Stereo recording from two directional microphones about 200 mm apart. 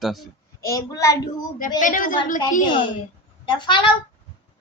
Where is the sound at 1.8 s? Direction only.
40° left (ahead or behind).